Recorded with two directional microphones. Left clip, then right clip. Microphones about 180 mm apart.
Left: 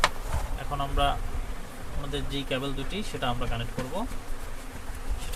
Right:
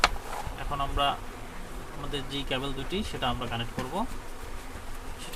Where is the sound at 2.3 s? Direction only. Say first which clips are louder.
Left 1 dB; 15° right (ahead or behind).